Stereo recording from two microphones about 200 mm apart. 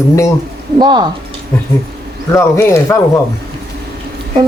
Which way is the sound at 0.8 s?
20° right (ahead or behind).